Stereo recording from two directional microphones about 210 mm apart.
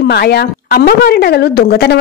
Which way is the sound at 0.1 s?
50° left (ahead or behind).